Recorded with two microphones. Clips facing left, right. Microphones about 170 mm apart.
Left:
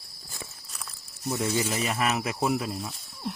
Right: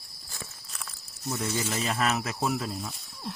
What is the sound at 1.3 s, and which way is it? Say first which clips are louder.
Speech: left 3 dB; 20° left (ahead or behind).